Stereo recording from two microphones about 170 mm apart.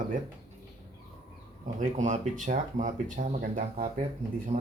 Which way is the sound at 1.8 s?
45° right (ahead or behind).